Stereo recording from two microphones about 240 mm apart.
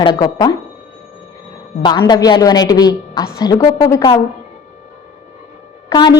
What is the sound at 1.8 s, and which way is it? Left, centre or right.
A woman's voice, centre.